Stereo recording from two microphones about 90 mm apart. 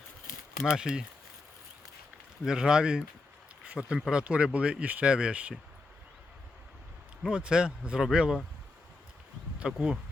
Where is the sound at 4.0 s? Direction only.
Centre (ahead or behind).